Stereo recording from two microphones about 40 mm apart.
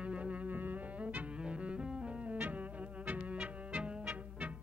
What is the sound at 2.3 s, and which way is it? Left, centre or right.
Music, right.